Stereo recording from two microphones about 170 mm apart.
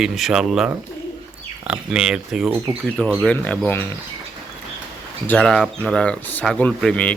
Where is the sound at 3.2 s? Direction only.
5° left (ahead or behind).